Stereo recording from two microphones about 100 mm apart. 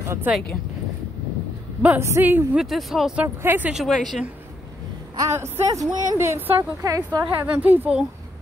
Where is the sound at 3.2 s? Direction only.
20° right (ahead or behind).